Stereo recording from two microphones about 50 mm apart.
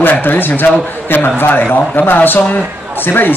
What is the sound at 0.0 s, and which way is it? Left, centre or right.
A man's voice, left.